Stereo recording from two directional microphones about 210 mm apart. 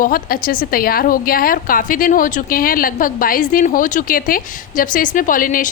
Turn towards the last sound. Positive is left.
turn(degrees=40)  # may be behind; listen again after turning